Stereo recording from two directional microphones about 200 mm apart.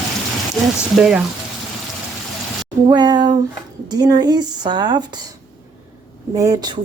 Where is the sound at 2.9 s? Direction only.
20° right (ahead or behind).